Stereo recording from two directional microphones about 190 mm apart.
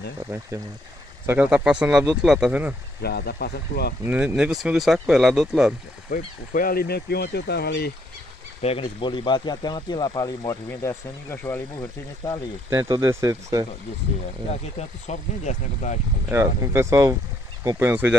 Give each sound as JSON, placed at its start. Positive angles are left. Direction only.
{"t": 1.2, "sound": "speech", "side_deg": -10}
{"t": 3.0, "sound": "speech", "side_deg": 55}
{"t": 4.0, "sound": "speech", "side_deg": -10}
{"t": 6.0, "sound": "speech", "side_deg": 45}
{"t": 8.6, "sound": "speech", "side_deg": 30}
{"t": 12.6, "sound": "speech", "side_deg": -15}
{"t": 14.5, "sound": "speech", "side_deg": 35}
{"t": 16.3, "sound": "speech", "side_deg": -15}